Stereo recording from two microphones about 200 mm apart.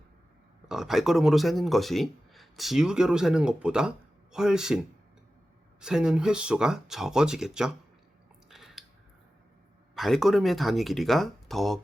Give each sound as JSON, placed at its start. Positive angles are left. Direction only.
{"t": 0.7, "sound": "speech", "side_deg": 0}
{"t": 5.8, "sound": "speech", "side_deg": -5}
{"t": 8.4, "sound": "chewing", "side_deg": 0}
{"t": 9.9, "sound": "speech", "side_deg": 0}